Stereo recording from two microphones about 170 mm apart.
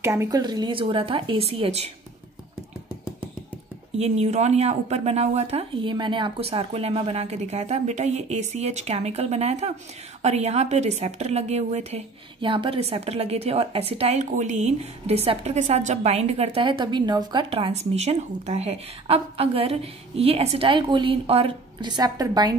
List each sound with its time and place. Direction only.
0.0 s a woman's voice: 15° right (ahead or behind); by 1.9 s 35° right (ahead or behind)
4.0 s a woman's voice: 40° right (ahead or behind); by 22.6 s 25° right (ahead or behind)